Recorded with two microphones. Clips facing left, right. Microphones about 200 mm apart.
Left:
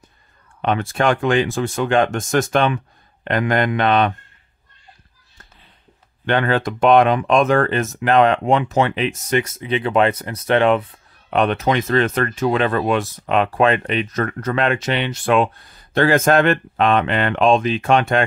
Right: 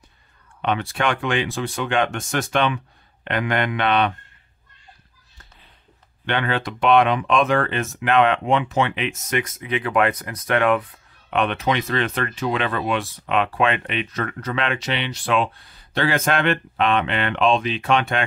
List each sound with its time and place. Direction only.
0.6 s speech: 45° left (ahead or behind)
6.2 s speech: 45° left (ahead or behind)
11.2 s speech: 40° left (ahead or behind)